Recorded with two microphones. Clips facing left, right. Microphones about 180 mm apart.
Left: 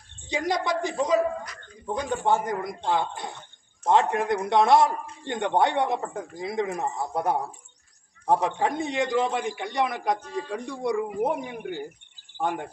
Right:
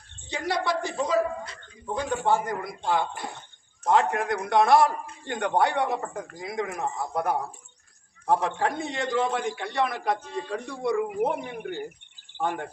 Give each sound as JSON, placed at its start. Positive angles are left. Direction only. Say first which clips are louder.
{"t": 0.3, "sound": "a man's voice", "louder": "left 1 dB", "side_deg": 15}